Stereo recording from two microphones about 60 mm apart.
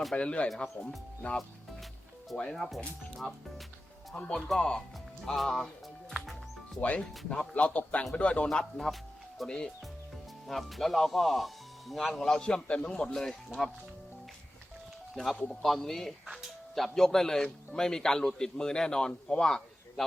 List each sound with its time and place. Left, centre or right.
0.2 s a man's voice: centre
2.3 s speech: centre
4.1 s a man's voice: centre
4.4 s speech: centre
5.2 s music: centre
7.3 s a man's voice: centre
10.4 s speech: centre
15.1 s a man's voice: centre